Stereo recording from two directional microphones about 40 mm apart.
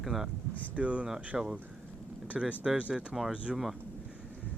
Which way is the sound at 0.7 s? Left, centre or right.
Right.